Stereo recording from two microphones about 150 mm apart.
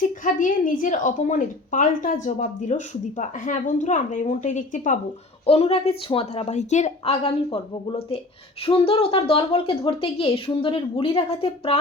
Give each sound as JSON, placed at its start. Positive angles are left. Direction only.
{"t": 0.0, "sound": "a woman's voice", "side_deg": 60}
{"t": 5.5, "sound": "a woman's voice", "side_deg": 45}